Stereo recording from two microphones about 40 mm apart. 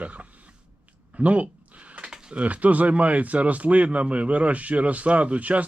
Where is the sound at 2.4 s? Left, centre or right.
Right.